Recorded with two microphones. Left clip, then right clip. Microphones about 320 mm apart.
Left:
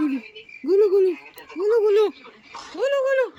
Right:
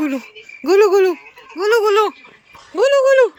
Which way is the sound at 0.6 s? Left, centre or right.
Centre.